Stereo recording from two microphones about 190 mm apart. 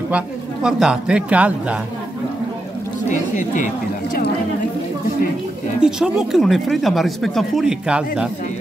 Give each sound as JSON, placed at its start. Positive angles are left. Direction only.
{"t": 0.1, "sound": "speech", "side_deg": -5}
{"t": 3.1, "sound": "speech", "side_deg": 40}
{"t": 5.8, "sound": "speech", "side_deg": -5}